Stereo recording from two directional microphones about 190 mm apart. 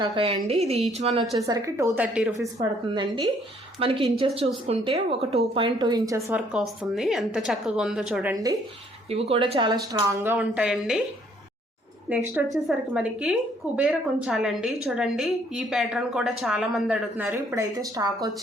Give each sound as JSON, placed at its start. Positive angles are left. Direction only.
{"t": 0.0, "sound": "a woman's voice", "side_deg": -25}
{"t": 1.4, "sound": "a woman's voice", "side_deg": -15}
{"t": 2.6, "sound": "a woman's voice", "side_deg": -25}
{"t": 9.0, "sound": "speech", "side_deg": -30}
{"t": 12.3, "sound": "a woman's voice", "side_deg": -15}
{"t": 17.2, "sound": "a woman's voice", "side_deg": -15}